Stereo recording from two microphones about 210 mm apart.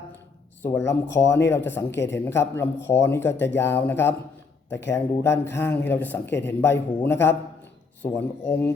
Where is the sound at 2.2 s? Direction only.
10° left (ahead or behind).